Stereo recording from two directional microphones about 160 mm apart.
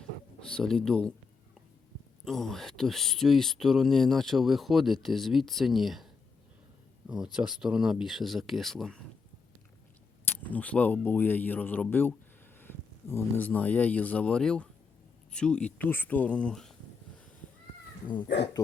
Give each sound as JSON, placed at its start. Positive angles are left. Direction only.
{"t": 0.5, "sound": "speech", "side_deg": 5}
{"t": 2.2, "sound": "speech", "side_deg": 0}
{"t": 7.3, "sound": "speech", "side_deg": -5}
{"t": 10.2, "sound": "speech", "side_deg": 10}
{"t": 18.0, "sound": "speech", "side_deg": 30}